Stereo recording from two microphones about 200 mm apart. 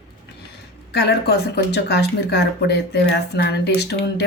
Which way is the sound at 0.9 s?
55° left (ahead or behind).